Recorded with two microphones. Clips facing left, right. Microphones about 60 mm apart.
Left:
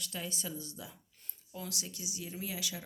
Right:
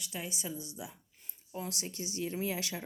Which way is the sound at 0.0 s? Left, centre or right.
Centre.